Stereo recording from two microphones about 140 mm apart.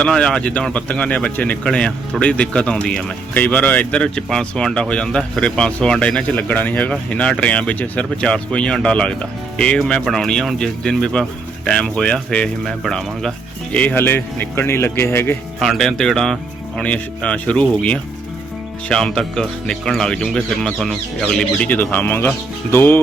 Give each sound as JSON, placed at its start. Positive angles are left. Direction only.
{"t": 0.0, "sound": "speech", "side_deg": 5}
{"t": 15.6, "sound": "speech", "side_deg": 0}